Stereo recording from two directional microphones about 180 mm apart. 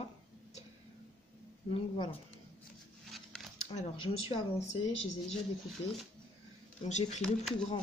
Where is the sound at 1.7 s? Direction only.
30° left (ahead or behind).